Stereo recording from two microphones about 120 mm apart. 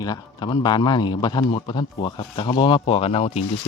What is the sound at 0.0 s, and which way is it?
A man's voice, 35° left (ahead or behind).